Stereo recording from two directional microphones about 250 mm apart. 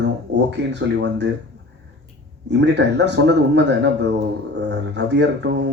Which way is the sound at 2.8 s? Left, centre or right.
Right.